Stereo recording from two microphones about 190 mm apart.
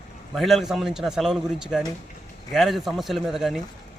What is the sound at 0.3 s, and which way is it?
Speech, centre (ahead or behind).